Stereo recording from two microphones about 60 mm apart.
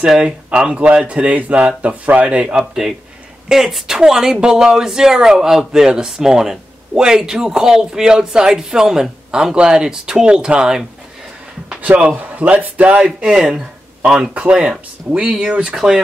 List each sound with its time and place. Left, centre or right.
0.0 s speech: centre
11.8 s speech: right